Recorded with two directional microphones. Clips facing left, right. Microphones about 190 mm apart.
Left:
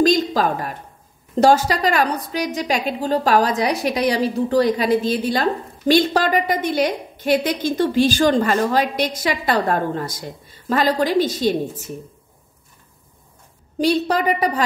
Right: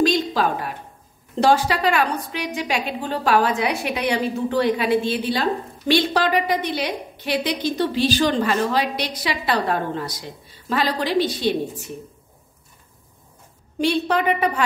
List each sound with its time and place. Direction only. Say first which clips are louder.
0.0 s a sound: left 3 dB; 40° left (ahead or behind)
1.3 s a woman's voice: left 3 dB; 45° left (ahead or behind)
13.7 s a woman's voice: left 2 dB; 40° left (ahead or behind)